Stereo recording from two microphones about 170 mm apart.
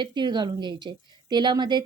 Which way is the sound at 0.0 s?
25° right (ahead or behind).